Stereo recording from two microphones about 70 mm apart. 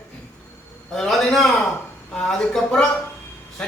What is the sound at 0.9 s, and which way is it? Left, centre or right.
A man's voice, centre.